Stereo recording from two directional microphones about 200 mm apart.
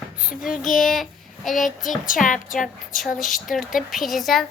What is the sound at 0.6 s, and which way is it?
Speech, centre (ahead or behind).